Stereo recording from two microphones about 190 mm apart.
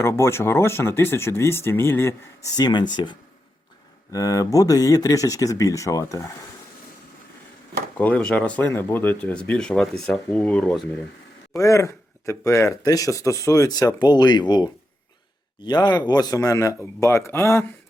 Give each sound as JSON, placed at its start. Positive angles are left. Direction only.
{"t": 0.0, "sound": "speech", "side_deg": 15}
{"t": 7.9, "sound": "a man's voice", "side_deg": 10}